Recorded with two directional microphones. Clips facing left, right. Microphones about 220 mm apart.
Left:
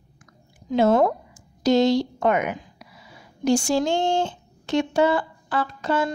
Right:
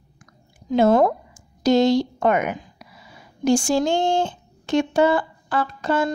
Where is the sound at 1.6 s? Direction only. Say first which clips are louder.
Right 2 dB; 50° right (ahead or behind).